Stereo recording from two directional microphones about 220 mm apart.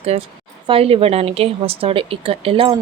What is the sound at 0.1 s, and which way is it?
A woman's voice, 25° right (ahead or behind).